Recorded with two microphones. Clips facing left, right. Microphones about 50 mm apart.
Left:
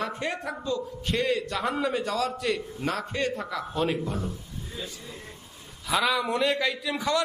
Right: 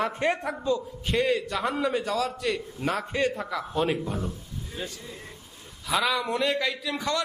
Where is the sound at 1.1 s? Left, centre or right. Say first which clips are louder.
Right 2 dB; centre.